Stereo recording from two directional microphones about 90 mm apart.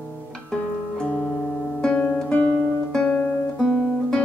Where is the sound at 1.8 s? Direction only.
15° left (ahead or behind).